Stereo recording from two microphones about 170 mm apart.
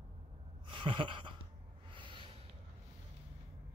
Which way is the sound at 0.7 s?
30° right (ahead or behind).